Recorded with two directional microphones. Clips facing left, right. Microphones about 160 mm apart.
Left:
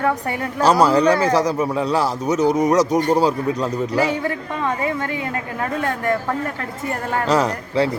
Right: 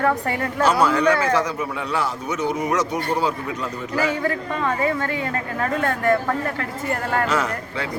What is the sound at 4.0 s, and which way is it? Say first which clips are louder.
A man's voice: left 2 dB; 20° left (ahead or behind).